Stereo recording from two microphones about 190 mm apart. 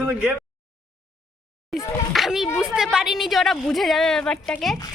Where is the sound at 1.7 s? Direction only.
Centre (ahead or behind).